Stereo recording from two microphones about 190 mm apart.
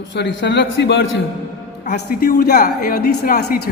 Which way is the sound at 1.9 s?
50° left (ahead or behind).